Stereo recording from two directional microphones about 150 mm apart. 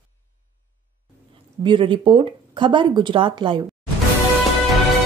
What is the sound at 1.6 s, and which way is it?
Speech, 35° right (ahead or behind).